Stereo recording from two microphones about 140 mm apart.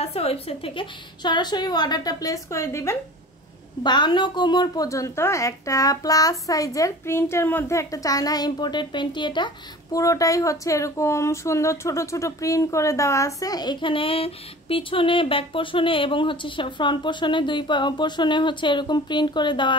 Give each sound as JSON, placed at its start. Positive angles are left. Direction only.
{"t": 0.0, "sound": "speech", "side_deg": 45}
{"t": 3.8, "sound": "a woman's voice", "side_deg": 30}